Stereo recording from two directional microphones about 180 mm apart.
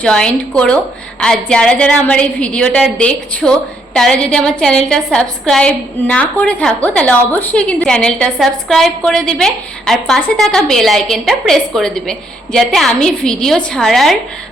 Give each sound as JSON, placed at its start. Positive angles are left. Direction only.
{"t": 0.0, "sound": "a woman's voice", "side_deg": 5}